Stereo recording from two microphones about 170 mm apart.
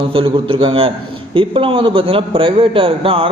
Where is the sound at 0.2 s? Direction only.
30° right (ahead or behind).